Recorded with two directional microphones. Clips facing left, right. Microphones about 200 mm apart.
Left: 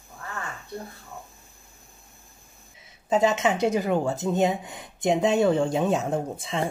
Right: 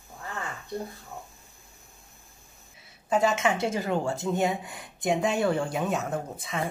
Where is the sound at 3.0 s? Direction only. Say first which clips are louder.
Left 2 dB; 20° left (ahead or behind).